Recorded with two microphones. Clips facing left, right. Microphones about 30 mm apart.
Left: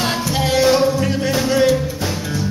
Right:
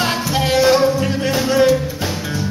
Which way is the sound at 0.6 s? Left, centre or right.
Centre.